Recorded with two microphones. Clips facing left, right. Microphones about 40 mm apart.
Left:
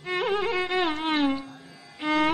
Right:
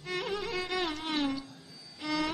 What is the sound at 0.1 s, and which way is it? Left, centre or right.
Music, left.